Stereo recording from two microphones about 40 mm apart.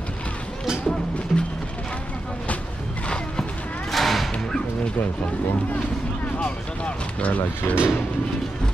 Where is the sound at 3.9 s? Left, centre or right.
Centre.